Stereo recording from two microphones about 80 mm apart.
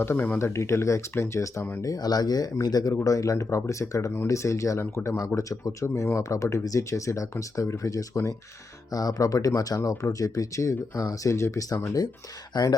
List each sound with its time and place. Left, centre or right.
0.0 s speech: left
1.8 s speech: left
12.5 s speech: left